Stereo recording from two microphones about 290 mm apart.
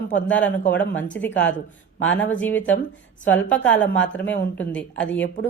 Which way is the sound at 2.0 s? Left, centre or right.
Left.